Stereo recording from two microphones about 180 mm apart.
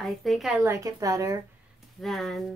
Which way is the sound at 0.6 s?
15° right (ahead or behind).